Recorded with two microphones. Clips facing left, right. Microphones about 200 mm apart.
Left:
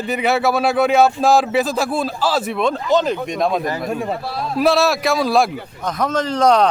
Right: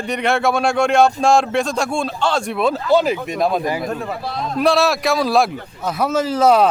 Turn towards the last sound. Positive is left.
turn(degrees=-5)  # may be behind; listen again after turning